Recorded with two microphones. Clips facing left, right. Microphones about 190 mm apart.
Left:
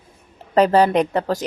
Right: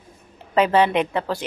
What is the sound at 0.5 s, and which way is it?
Speech, 40° left (ahead or behind).